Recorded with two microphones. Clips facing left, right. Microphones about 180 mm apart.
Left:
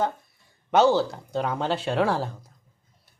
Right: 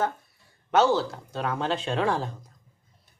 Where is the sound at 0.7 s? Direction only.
15° left (ahead or behind).